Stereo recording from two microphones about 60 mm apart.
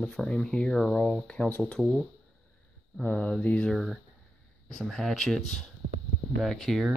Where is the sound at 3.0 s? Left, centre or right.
Left.